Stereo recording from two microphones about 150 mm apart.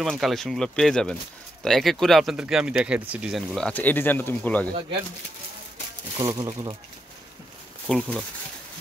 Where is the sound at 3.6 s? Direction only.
10° left (ahead or behind).